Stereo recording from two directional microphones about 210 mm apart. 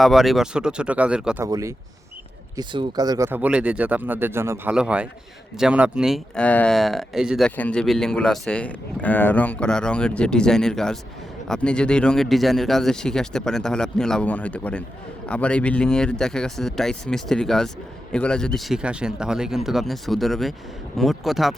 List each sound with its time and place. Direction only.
0.0 s speech: centre (ahead or behind)
1.5 s speech: 15° right (ahead or behind); by 21.5 s centre (ahead or behind)